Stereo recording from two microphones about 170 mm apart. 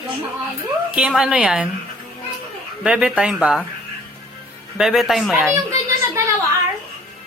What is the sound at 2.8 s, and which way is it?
Speech, 5° right (ahead or behind).